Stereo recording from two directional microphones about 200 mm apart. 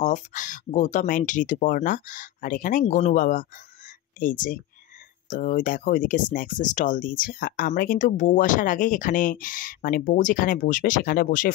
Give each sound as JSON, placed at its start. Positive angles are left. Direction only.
{"t": 0.0, "sound": "speech", "side_deg": 40}